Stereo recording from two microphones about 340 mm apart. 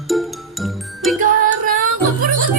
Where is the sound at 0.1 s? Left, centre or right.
Centre.